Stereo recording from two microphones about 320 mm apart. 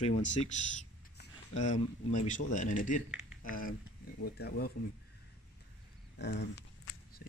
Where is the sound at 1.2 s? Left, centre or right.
Left.